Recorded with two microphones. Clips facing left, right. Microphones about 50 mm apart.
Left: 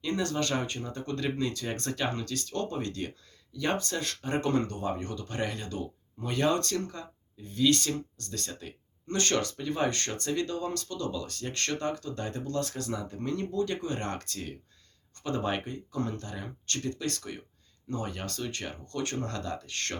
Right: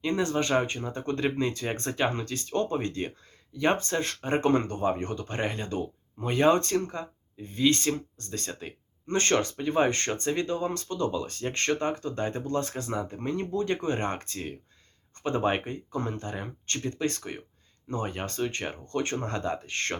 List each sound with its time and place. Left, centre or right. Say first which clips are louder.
0.0 s speech: right 3 dB; right